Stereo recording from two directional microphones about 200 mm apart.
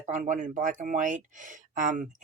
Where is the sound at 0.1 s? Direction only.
40° right (ahead or behind).